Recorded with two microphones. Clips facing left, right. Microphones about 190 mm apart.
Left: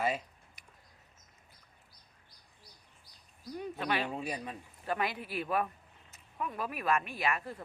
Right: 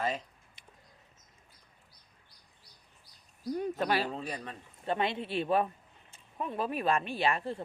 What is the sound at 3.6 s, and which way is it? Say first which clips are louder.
Speech: right 3 dB; 40° right (ahead or behind).